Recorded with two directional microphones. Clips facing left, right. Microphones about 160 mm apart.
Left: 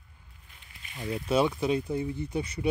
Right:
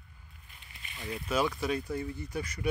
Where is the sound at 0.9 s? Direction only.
30° left (ahead or behind).